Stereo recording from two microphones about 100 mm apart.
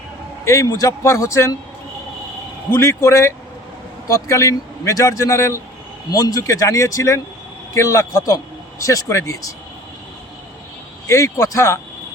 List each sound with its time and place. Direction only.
0.4 s speech: 30° left (ahead or behind)
2.7 s a man's voice: 30° left (ahead or behind)
6.1 s a man's voice: 40° left (ahead or behind)
11.1 s a man's voice: 30° left (ahead or behind)